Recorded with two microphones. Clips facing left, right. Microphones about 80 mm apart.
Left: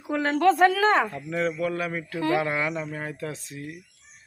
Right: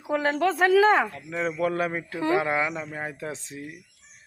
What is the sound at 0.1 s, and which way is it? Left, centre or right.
A woman's voice, centre.